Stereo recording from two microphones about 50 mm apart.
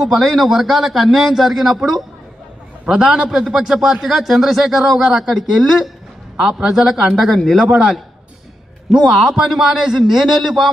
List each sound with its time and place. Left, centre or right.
0.2 s a man's voice: centre
2.9 s a man's voice: centre
7.6 s speech: centre
9.1 s a man's voice: centre